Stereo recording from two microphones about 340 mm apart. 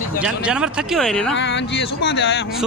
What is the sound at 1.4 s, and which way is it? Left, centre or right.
Speech, left.